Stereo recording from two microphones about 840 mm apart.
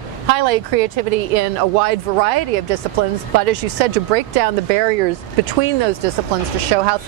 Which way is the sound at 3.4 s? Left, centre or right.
Right.